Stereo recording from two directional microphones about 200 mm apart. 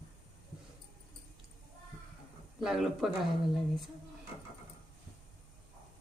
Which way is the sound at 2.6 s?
Centre (ahead or behind).